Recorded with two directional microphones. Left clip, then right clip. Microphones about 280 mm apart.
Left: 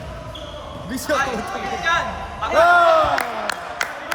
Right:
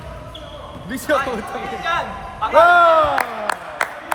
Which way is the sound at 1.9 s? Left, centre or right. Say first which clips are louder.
Left 2 dB; centre.